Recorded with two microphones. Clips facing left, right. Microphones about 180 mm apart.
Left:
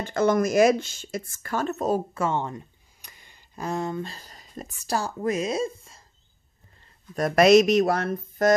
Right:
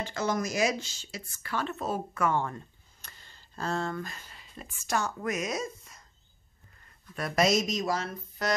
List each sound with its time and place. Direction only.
0.0 s speech: 55° left (ahead or behind)
2.1 s a sound: 25° left (ahead or behind)
4.0 s speech: 35° left (ahead or behind)
7.2 s speech: 45° left (ahead or behind)
7.4 s speech: 65° left (ahead or behind); by 8.5 s 50° left (ahead or behind)